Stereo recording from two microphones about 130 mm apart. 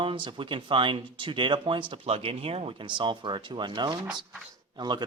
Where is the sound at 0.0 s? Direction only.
40° right (ahead or behind).